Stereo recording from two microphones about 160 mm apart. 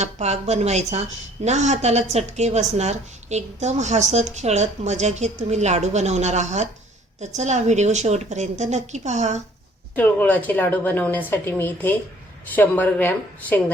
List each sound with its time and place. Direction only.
0.0 s a woman's voice: 45° right (ahead or behind)
9.9 s a woman's voice: 10° left (ahead or behind)